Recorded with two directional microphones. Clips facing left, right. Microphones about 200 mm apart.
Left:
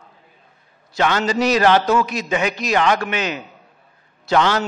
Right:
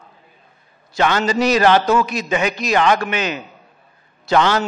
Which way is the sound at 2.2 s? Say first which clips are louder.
Right 1 dB; 15° right (ahead or behind).